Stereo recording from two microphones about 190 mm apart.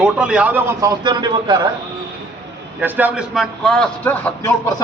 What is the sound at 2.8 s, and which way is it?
A man's voice, 10° right (ahead or behind).